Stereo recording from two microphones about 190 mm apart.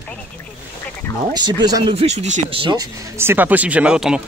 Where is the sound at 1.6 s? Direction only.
20° right (ahead or behind); by 4.2 s 5° right (ahead or behind).